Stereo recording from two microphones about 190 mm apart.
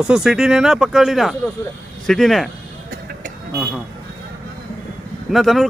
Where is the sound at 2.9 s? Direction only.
50° right (ahead or behind).